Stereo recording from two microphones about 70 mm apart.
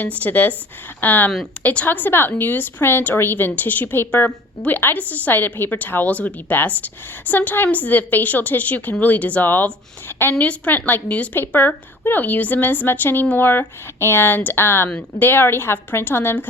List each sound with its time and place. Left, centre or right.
0.2 s a woman's voice: left
10.3 s a woman's voice: centre